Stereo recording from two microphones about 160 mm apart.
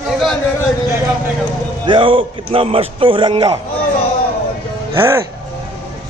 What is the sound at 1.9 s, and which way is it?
A man's voice, 30° right (ahead or behind).